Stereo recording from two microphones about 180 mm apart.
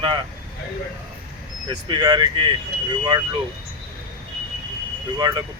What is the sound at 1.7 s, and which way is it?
Speech, 25° right (ahead or behind).